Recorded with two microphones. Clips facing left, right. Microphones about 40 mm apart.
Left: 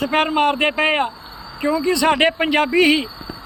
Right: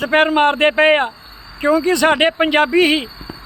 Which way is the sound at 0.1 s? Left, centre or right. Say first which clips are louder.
Right 4 dB; right.